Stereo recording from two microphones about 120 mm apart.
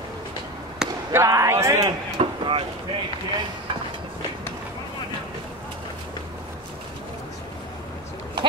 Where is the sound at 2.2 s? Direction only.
50° right (ahead or behind).